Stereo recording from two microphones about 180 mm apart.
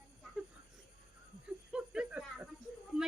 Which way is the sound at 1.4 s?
5° right (ahead or behind).